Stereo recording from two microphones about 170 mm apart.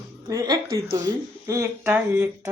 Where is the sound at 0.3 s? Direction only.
20° right (ahead or behind).